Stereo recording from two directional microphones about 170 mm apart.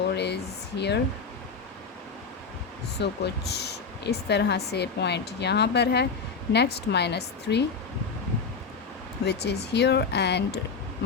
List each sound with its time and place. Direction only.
0.1 s a sound: 80° left
0.8 s speech: 80° left
3.0 s speech: 75° left (ahead or behind)
9.2 s speech: 75° left (ahead or behind)